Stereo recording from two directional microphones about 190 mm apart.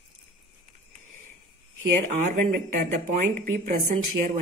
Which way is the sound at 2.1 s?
40° right (ahead or behind).